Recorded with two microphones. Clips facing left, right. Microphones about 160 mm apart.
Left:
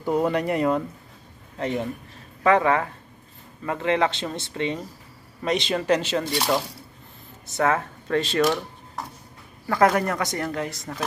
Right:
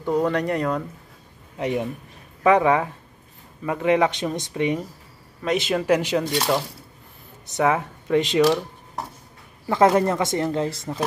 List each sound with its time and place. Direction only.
0.0 s speech: 5° left (ahead or behind)
1.6 s speech: 15° right (ahead or behind)
6.3 s speech: centre (ahead or behind)
7.4 s speech: 15° right (ahead or behind)
9.7 s speech: 25° right (ahead or behind)